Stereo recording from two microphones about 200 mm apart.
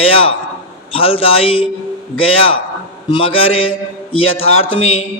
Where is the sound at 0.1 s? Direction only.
30° left (ahead or behind).